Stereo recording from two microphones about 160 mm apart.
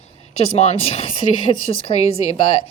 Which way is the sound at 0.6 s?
40° left (ahead or behind).